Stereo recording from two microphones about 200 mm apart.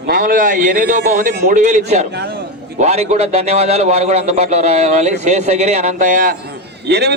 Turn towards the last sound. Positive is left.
turn(degrees=-55)  # may be behind; listen again after turning